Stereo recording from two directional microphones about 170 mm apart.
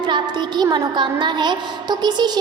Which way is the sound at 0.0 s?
25° right (ahead or behind).